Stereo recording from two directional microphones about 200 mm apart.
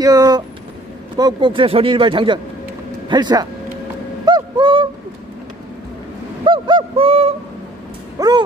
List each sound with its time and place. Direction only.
0.0 s speech: 20° right (ahead or behind)
4.3 s honk: 25° right (ahead or behind)
6.4 s speech: 25° right (ahead or behind)